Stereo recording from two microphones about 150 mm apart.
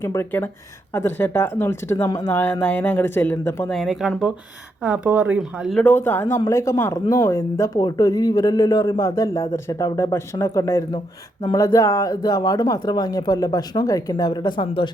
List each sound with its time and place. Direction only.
0.0 s speech: 15° left (ahead or behind)
2.3 s speech: 10° left (ahead or behind)
3.8 s speech: centre (ahead or behind)
5.8 s speech: 15° left (ahead or behind); by 14.8 s 35° left (ahead or behind)